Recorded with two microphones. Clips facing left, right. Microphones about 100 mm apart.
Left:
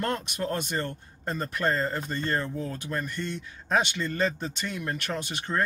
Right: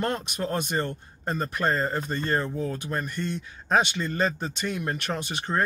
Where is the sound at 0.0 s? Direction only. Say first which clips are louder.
Right 1 dB; 25° right (ahead or behind).